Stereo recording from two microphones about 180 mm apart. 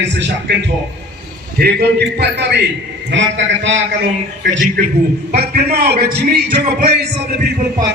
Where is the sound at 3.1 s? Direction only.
85° right.